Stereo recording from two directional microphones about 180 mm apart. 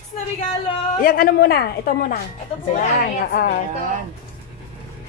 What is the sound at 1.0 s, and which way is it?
A woman's voice, 55° left (ahead or behind).